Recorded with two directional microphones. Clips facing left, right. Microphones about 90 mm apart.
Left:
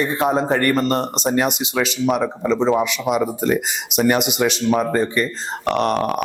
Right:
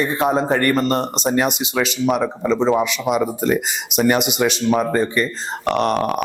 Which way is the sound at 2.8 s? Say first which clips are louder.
Even; 10° right (ahead or behind).